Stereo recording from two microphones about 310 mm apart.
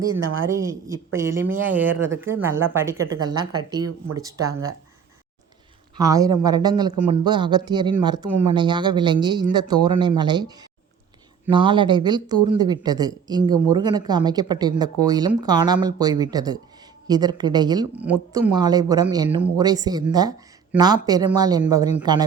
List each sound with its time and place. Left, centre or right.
0.1 s a woman's voice: right
0.4 s speech: centre
6.0 s speech: centre
11.5 s speech: centre